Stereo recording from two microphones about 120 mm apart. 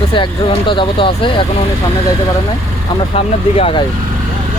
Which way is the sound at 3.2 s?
55° left (ahead or behind).